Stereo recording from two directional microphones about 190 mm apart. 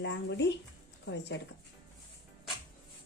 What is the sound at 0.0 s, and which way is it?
A woman's voice, 70° left (ahead or behind).